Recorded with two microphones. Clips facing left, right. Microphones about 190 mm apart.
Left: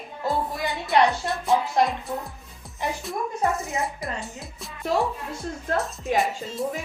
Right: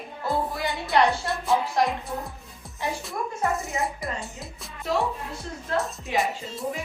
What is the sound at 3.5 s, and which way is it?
Speech, centre (ahead or behind).